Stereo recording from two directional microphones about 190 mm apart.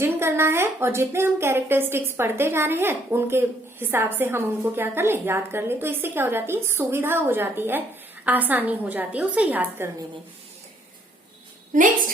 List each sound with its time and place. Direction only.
0.0 s a woman's voice: 15° right (ahead or behind)
11.7 s a woman's voice: 40° right (ahead or behind)